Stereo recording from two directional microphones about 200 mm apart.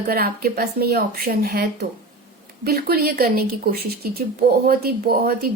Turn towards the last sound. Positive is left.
turn(degrees=-50)  # may be behind; listen again after turning